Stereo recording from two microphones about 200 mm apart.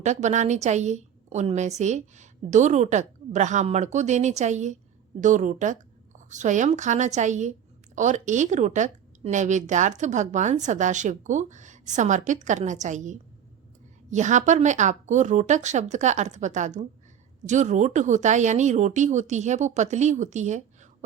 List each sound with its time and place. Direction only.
0.0 s a woman's voice: 35° right (ahead or behind)